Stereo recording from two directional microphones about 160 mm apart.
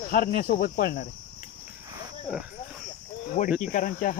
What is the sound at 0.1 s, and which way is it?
Cricket, 60° left (ahead or behind).